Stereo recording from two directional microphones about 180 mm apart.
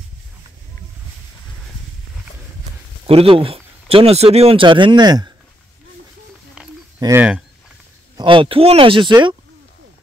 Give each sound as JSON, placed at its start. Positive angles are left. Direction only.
{"t": 3.1, "sound": "speech", "side_deg": -30}
{"t": 7.0, "sound": "speech", "side_deg": -10}
{"t": 8.2, "sound": "speech", "side_deg": -30}